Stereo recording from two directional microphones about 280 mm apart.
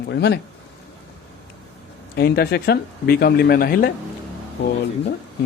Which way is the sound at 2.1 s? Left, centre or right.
Left.